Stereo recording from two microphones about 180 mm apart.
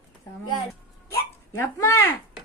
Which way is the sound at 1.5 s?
15° left (ahead or behind).